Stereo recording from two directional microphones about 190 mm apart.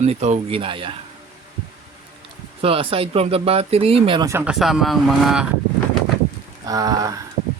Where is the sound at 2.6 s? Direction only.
30° right (ahead or behind).